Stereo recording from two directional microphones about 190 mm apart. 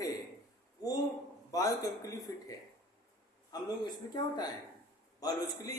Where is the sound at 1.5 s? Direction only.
15° left (ahead or behind).